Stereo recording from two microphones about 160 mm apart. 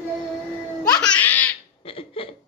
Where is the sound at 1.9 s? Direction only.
35° left (ahead or behind).